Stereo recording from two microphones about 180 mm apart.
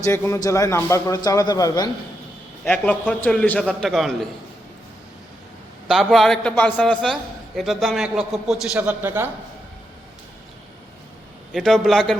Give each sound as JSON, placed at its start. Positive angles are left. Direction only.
{"t": 0.0, "sound": "a man's voice", "side_deg": 15}
{"t": 2.6, "sound": "a man's voice", "side_deg": 10}
{"t": 5.9, "sound": "a man's voice", "side_deg": 0}
{"t": 11.5, "sound": "a man's voice", "side_deg": 0}